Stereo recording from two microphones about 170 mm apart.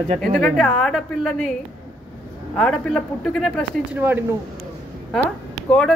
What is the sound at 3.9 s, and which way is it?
Speech, 10° right (ahead or behind).